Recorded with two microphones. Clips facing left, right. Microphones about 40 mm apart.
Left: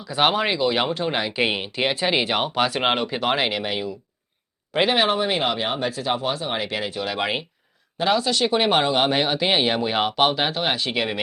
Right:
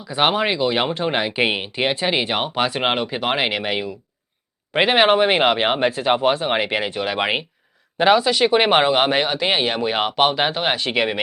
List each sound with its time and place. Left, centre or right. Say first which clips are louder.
0.0 s speech: right 2 dB; centre; by 5.0 s right
5.0 s speech: right 6 dB; right
5.9 s speech: right 6 dB; right
7.9 s speech: right 6 dB; right
8.5 s speech: right 3 dB; right
9.2 s speech: right 1 dB; centre
10.4 s speech: right 3 dB; centre